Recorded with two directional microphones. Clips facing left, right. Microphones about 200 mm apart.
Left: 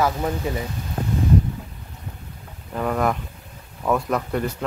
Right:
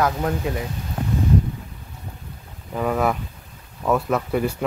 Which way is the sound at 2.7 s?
5° right (ahead or behind).